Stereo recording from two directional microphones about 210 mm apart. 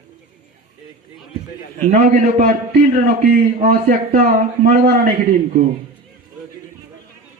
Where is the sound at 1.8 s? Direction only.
40° right (ahead or behind).